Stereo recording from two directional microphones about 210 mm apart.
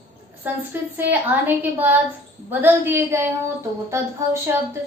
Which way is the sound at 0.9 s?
10° right (ahead or behind).